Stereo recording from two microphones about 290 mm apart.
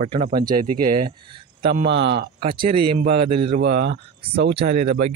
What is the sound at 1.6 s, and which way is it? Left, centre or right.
Speech, right.